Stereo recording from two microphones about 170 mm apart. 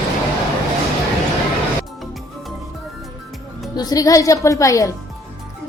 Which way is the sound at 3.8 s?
20° left (ahead or behind).